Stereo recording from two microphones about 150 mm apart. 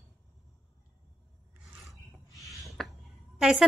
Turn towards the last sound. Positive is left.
turn(degrees=-5)  # may be behind; listen again after turning